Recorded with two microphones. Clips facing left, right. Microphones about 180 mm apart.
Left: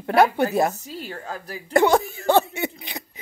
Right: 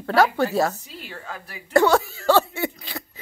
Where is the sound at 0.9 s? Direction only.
40° left (ahead or behind).